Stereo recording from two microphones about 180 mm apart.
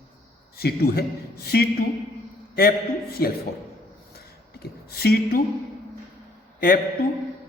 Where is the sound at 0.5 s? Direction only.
60° left (ahead or behind).